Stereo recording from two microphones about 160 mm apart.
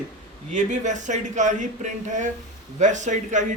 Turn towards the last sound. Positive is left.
turn(degrees=-50)  # may be behind; listen again after turning